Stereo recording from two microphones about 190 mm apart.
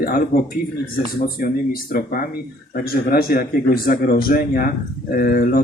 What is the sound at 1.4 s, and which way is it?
Speech, 50° left (ahead or behind).